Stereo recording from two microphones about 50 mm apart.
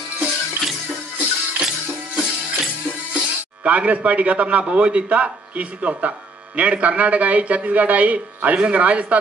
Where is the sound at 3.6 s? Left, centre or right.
Right.